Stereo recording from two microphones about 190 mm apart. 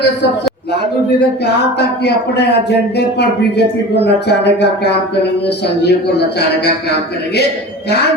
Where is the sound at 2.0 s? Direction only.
60° left (ahead or behind).